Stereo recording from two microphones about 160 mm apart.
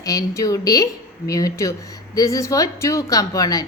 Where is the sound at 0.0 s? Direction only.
20° left (ahead or behind).